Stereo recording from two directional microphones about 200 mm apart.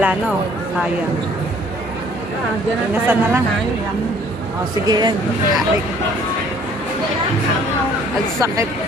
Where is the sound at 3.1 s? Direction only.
10° right (ahead or behind).